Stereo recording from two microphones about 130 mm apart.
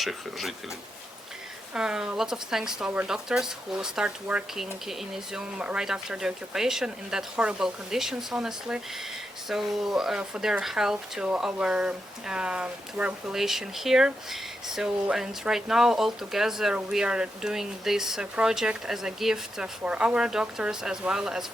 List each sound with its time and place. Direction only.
0.0 s speech: centre (ahead or behind)
1.7 s speech: 5° right (ahead or behind)